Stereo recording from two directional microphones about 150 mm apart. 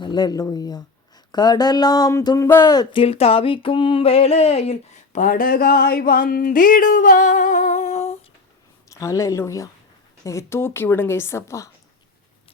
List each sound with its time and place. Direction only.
0.0 s speech: 30° left (ahead or behind)
2.6 s a sound: 30° left (ahead or behind)
8.9 s a woman's voice: 20° left (ahead or behind)